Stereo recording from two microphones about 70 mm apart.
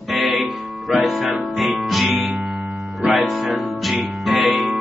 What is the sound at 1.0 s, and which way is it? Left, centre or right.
Music, centre.